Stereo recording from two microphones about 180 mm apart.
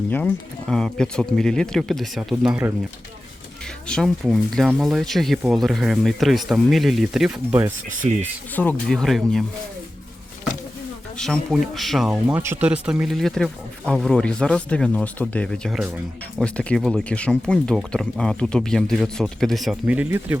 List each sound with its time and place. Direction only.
0.1 s speech: 10° left (ahead or behind)
3.8 s speech: centre (ahead or behind)
8.0 s speech: 35° right (ahead or behind)
8.5 s speech: 5° left (ahead or behind)
11.2 s speech: centre (ahead or behind)